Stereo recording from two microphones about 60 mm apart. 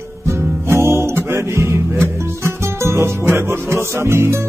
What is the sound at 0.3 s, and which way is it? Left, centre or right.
Music, right.